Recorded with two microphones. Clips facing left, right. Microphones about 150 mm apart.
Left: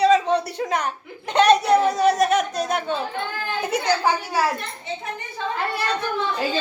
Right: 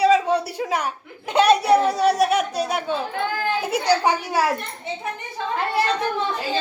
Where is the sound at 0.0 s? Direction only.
10° right (ahead or behind).